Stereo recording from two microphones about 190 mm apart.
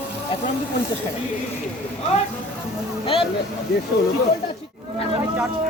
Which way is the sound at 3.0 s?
30° left (ahead or behind).